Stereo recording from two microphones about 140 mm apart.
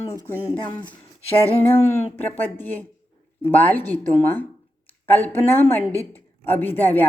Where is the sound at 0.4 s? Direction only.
15° left (ahead or behind).